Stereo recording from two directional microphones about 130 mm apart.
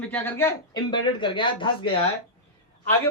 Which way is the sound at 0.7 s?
35° left (ahead or behind).